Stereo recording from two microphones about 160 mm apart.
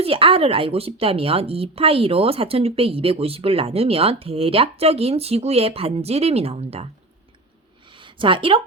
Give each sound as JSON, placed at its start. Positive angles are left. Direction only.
{"t": 0.0, "sound": "a woman's voice", "side_deg": -35}
{"t": 7.9, "sound": "a woman's voice", "side_deg": -30}